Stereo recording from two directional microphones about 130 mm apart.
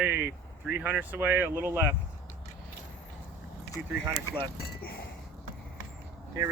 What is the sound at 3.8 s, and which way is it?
Speech, 5° right (ahead or behind).